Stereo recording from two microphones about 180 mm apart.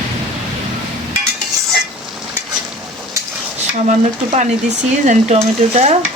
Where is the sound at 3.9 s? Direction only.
40° right (ahead or behind).